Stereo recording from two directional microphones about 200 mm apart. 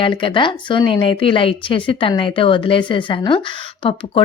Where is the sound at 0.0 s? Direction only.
25° left (ahead or behind).